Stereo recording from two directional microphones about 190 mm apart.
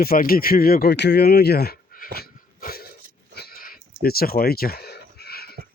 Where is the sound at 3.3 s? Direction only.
55° left (ahead or behind).